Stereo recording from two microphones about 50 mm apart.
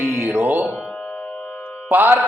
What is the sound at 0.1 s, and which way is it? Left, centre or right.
Music, right.